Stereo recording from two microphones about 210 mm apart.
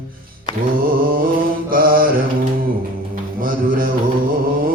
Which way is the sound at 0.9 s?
45° right (ahead or behind).